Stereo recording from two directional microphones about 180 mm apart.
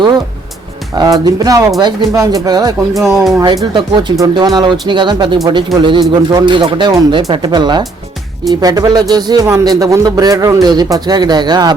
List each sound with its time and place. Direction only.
0.9 s speech: 25° right (ahead or behind)